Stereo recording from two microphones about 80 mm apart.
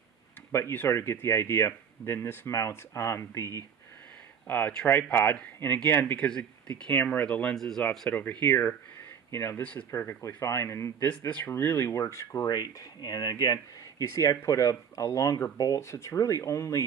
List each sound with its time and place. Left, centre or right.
0.5 s speech: left
2.5 s speech: left
4.5 s speech: left; by 7.8 s centre
8.1 s speech: left
9.6 s speech: centre
9.8 s speech: left
11.1 s speech: centre
11.5 s speech: left
11.9 s speech: left
13.0 s speech: left
15.8 s speech: left